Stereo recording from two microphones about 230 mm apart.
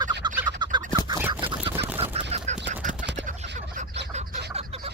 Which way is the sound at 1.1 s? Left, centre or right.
Centre.